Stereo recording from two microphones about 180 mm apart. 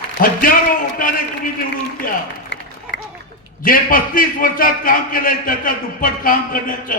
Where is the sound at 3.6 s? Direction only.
50° left (ahead or behind).